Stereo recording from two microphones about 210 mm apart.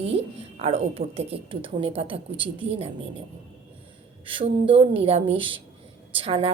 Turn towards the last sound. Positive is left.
turn(degrees=-25)  # may be behind; listen again after turning